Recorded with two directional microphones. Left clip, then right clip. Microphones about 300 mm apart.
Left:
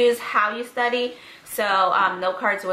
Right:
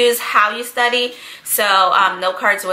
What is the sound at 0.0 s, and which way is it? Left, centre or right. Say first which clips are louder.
A woman's voice: right 5 dB; centre.